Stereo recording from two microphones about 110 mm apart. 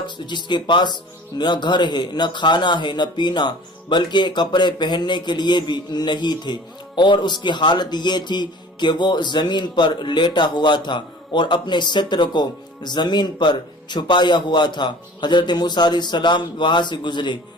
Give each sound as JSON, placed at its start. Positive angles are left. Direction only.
{"t": 0.3, "sound": "speech", "side_deg": 45}